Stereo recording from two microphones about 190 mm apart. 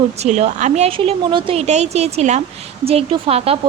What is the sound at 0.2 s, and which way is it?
A woman's voice, 35° right (ahead or behind).